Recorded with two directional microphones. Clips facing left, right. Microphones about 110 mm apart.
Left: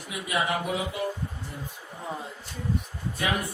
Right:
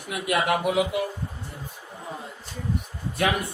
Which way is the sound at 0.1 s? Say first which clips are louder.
Right 4 dB; 65° right (ahead or behind).